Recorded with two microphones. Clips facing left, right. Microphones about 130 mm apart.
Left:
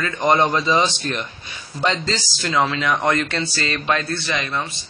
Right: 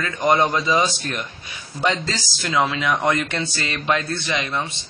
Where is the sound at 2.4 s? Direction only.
10° right (ahead or behind).